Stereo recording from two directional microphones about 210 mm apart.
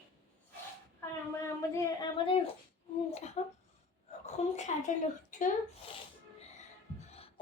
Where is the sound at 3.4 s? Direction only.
30° left (ahead or behind).